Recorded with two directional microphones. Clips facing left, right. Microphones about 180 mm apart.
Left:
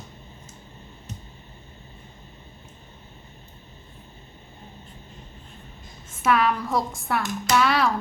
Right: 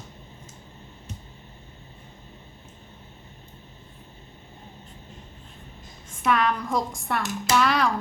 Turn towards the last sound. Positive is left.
turn(degrees=0)  # may be behind; listen again after turning